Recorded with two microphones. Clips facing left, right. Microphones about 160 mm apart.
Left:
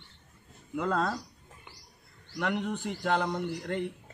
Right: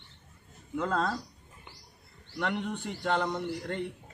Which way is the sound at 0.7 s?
Centre (ahead or behind).